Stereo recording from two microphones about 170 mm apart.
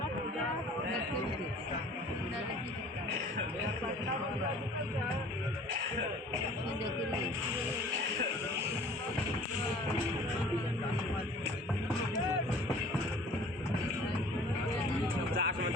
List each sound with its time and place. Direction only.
15.0 s music: 60° right (ahead or behind)